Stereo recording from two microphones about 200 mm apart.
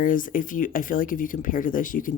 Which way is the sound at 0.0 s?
40° left (ahead or behind).